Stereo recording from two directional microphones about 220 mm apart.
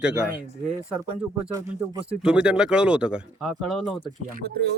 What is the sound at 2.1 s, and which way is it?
Speech, 5° right (ahead or behind).